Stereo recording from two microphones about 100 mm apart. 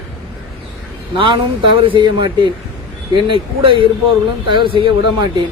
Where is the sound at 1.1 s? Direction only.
55° right (ahead or behind).